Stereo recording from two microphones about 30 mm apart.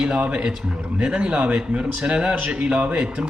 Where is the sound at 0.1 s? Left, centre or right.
Right.